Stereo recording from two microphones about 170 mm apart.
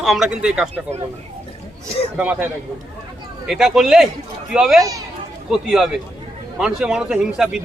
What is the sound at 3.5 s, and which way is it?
A man's voice, 5° right (ahead or behind).